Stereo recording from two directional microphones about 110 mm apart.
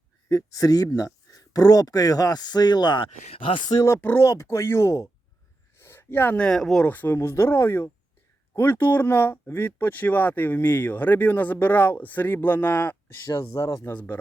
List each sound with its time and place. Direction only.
0.3 s speech: 30° left (ahead or behind)
3.2 s speech: 55° left (ahead or behind)
4.0 s speech: 25° left (ahead or behind); by 6.8 s 5° left (ahead or behind)
6.8 s speech: 15° left (ahead or behind)